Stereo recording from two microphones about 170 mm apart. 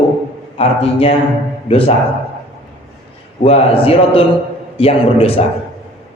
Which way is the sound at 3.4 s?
35° left (ahead or behind).